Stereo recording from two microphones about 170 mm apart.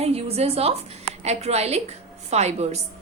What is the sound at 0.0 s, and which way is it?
A woman's voice, 35° right (ahead or behind).